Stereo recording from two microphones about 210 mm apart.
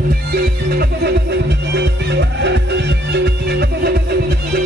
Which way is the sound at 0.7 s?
50° right (ahead or behind).